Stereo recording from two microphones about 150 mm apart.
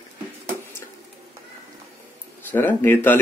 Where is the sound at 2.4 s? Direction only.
10° left (ahead or behind).